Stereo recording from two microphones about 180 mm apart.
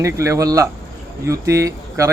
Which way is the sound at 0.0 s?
15° right (ahead or behind).